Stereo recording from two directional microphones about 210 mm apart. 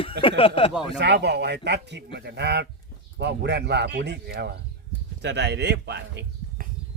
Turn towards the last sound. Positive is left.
turn(degrees=-50)  # may be behind; listen again after turning